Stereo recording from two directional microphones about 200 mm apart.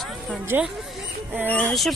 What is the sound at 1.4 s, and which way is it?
Speech, 5° left (ahead or behind).